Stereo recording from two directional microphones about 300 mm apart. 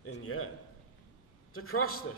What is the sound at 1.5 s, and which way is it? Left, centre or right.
Speech, left.